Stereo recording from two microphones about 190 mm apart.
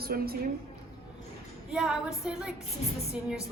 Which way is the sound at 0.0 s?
55° right (ahead or behind).